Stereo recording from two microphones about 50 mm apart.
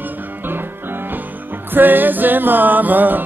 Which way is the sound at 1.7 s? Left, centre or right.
Right.